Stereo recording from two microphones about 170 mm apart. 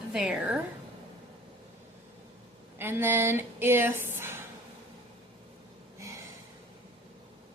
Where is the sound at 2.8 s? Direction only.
15° right (ahead or behind).